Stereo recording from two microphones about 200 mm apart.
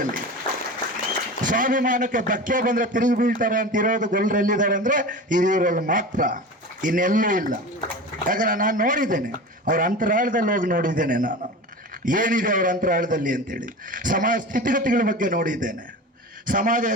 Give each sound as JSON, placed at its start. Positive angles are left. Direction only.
{"t": 1.4, "sound": "a man's voice", "side_deg": -40}